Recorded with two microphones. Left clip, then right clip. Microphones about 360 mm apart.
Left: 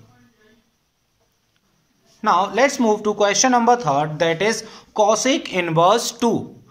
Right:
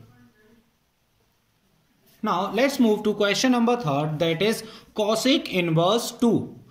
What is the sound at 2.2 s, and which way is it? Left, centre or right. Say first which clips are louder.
A man's voice: left 7 dB; left.